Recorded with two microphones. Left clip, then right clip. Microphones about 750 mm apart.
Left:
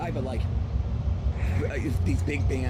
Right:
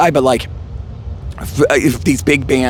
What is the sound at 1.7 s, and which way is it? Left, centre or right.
Speech, right.